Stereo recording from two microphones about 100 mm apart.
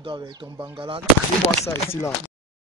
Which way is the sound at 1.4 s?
25° left (ahead or behind).